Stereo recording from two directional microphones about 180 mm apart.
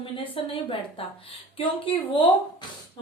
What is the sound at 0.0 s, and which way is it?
A woman's voice, 30° left (ahead or behind).